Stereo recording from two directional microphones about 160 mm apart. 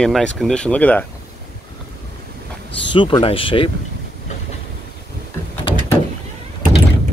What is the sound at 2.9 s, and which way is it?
Speech, 30° left (ahead or behind).